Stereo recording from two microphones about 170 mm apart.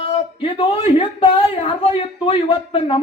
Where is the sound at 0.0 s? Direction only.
30° left (ahead or behind).